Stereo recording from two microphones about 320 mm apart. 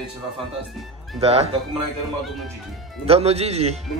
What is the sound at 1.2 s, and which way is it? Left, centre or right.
Speech, centre.